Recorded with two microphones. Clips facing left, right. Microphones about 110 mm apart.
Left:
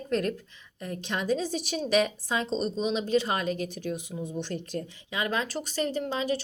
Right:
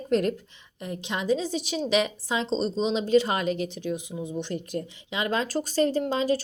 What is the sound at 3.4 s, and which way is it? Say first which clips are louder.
Speech: right 3 dB; 40° left (ahead or behind).